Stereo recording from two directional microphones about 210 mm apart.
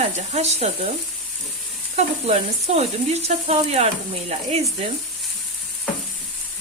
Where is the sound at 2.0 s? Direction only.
30° right (ahead or behind).